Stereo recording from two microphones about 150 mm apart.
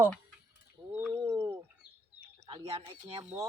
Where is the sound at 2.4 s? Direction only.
40° right (ahead or behind).